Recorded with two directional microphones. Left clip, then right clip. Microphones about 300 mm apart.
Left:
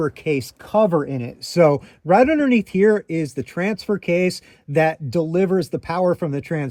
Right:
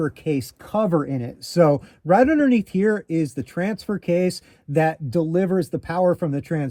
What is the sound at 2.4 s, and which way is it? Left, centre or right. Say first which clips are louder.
Speech: left 1 dB; centre.